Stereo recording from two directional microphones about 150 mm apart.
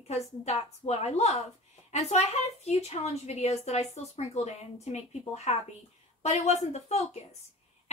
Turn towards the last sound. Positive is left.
turn(degrees=45)  # may be behind; listen again after turning